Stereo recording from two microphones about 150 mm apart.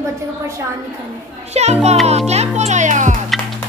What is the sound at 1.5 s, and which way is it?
Speech, 45° right (ahead or behind).